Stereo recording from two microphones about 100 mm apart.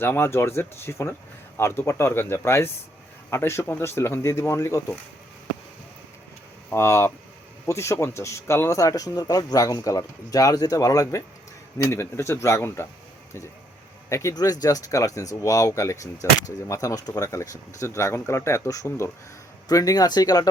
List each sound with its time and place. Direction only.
0.0 s speech: 25° left (ahead or behind)
6.7 s speech: 25° left (ahead or behind)
14.1 s speech: 30° left (ahead or behind)
19.6 s speech: 40° left (ahead or behind)